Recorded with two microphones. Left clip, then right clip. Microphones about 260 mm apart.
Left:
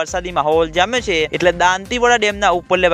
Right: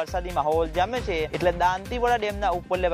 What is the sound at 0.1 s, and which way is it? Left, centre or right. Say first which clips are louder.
Speech: left 8 dB; left.